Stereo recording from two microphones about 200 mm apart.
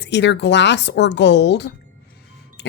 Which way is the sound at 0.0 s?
60° left (ahead or behind).